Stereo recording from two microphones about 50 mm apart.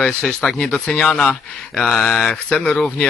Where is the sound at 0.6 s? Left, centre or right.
Centre.